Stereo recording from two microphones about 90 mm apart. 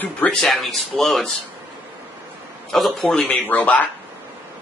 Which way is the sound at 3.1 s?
15° left (ahead or behind).